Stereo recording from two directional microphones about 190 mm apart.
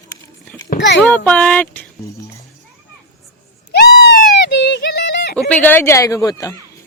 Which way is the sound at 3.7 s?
60° left (ahead or behind).